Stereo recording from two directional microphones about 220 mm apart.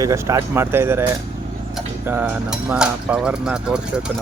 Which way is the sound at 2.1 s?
10° right (ahead or behind).